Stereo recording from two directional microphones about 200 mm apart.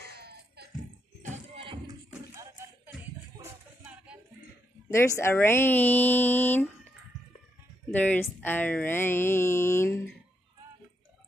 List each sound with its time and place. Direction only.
0.0 s a sound: 55° right (ahead or behind)
1.3 s music: 25° right (ahead or behind)
2.0 s music: 10° right (ahead or behind)
4.8 s speech: 15° left (ahead or behind)
7.9 s speech: 10° left (ahead or behind)